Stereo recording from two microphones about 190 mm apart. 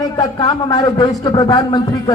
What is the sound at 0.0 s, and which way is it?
A man's voice, 20° left (ahead or behind).